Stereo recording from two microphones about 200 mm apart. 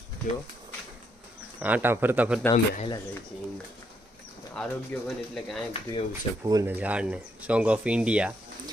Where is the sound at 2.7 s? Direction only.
25° left (ahead or behind).